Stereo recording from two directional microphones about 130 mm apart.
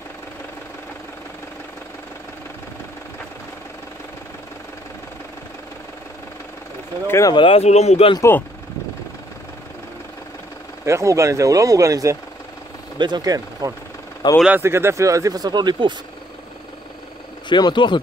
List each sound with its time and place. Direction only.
7.1 s speech: 25° left (ahead or behind)
7.3 s speech: 45° left (ahead or behind)
8.2 s speech: 15° left (ahead or behind)
10.9 s speech: 20° right (ahead or behind)
14.2 s speech: 35° left (ahead or behind)
14.6 s speech: 20° right (ahead or behind)
17.5 s speech: 35° left (ahead or behind)